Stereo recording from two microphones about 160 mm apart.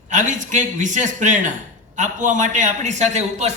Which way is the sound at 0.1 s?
50° right (ahead or behind).